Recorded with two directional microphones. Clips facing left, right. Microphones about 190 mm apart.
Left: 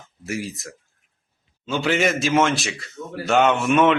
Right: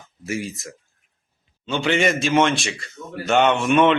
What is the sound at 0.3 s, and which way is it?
A man's voice, centre (ahead or behind).